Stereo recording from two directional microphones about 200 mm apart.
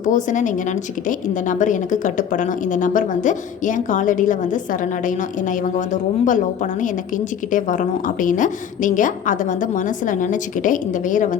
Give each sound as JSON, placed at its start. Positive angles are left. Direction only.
{"t": 0.0, "sound": "a woman's voice", "side_deg": 40}